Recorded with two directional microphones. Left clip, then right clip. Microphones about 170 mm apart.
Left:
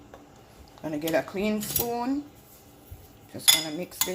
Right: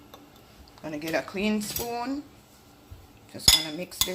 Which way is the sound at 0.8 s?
30° left (ahead or behind).